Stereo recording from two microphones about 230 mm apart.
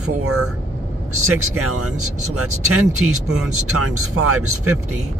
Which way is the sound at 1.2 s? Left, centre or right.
Right.